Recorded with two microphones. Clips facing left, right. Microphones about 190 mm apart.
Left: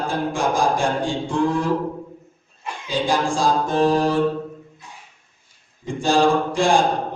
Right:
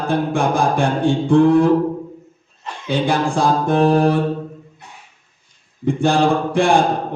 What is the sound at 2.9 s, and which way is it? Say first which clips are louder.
A man's voice: right 3 dB; 60° right (ahead or behind).